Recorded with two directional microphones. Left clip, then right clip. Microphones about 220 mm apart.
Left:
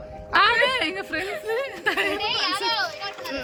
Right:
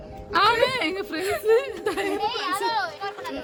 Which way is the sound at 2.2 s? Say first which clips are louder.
Left 1 dB; 30° right (ahead or behind).